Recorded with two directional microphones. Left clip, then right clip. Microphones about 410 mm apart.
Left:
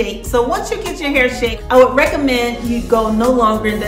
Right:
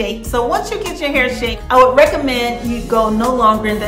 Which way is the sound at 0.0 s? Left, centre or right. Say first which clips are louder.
Left 1 dB; centre.